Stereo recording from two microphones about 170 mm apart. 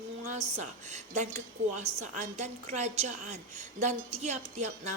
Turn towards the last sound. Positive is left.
turn(degrees=-45)  # may be behind; listen again after turning